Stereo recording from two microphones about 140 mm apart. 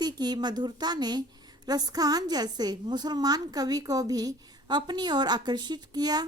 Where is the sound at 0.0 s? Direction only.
30° right (ahead or behind).